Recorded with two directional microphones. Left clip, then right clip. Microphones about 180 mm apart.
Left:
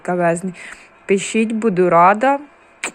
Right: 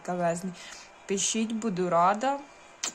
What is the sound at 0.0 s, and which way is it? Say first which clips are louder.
Speech: left 11 dB; 25° left (ahead or behind).